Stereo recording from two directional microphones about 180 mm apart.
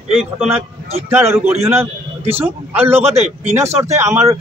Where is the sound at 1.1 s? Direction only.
15° right (ahead or behind).